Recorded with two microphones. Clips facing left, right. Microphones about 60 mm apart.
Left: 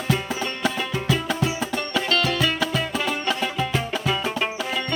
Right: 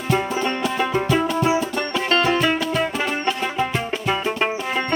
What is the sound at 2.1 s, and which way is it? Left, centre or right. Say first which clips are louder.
Music: right 6 dB; right.